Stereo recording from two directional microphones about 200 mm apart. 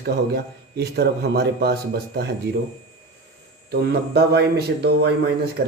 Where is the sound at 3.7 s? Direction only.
55° right (ahead or behind).